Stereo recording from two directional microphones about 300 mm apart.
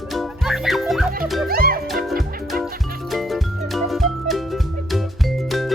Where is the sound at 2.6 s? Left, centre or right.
Centre.